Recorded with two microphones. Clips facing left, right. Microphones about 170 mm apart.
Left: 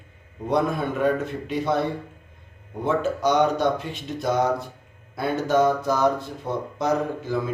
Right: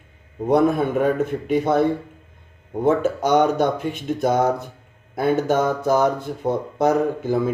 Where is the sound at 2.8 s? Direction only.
50° right (ahead or behind).